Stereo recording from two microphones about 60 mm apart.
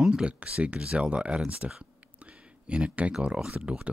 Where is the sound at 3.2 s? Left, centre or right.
Centre.